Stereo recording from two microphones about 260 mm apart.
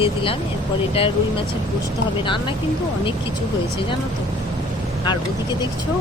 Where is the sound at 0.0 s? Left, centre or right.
Left.